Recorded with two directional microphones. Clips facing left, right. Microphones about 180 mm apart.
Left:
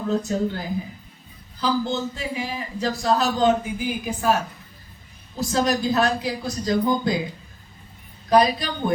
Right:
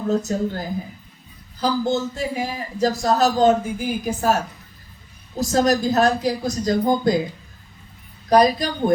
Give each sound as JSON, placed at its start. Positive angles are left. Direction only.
{"t": 0.1, "sound": "a man's voice", "side_deg": -45}
{"t": 8.3, "sound": "a man's voice", "side_deg": -40}